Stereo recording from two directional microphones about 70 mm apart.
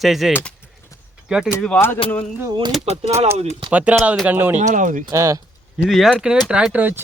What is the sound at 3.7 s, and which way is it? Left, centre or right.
Speech, right.